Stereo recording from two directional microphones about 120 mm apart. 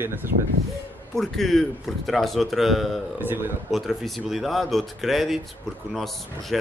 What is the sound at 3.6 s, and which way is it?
Speech, centre (ahead or behind).